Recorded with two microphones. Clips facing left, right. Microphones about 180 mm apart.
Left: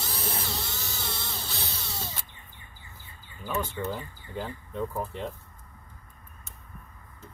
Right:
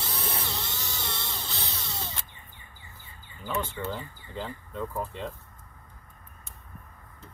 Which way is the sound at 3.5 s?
15° left (ahead or behind).